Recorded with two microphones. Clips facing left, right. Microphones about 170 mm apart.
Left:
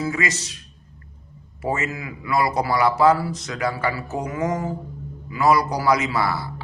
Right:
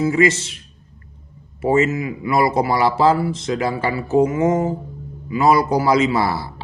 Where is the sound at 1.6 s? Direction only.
25° right (ahead or behind).